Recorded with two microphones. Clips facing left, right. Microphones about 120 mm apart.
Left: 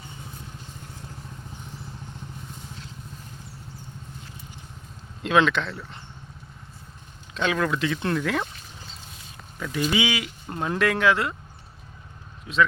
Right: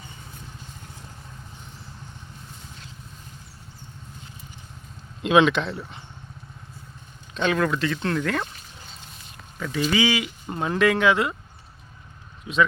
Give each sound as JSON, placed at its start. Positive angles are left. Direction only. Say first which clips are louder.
{"t": 5.3, "sound": "speech", "louder": "right 3 dB", "side_deg": -5}
{"t": 5.6, "sound": "speech", "louder": "right 3 dB", "side_deg": -20}
{"t": 7.3, "sound": "speech", "louder": "right 2 dB", "side_deg": 0}
{"t": 9.6, "sound": "speech", "louder": "right 2 dB", "side_deg": 0}
{"t": 10.2, "sound": "speech", "louder": "right 1 dB", "side_deg": -5}